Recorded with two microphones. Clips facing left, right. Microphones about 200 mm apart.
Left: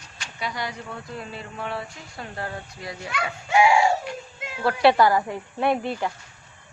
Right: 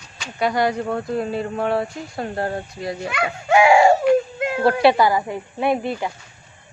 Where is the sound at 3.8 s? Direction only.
75° right (ahead or behind).